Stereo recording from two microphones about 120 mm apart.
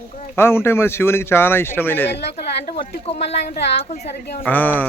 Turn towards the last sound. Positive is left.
turn(degrees=15)  # may be behind; listen again after turning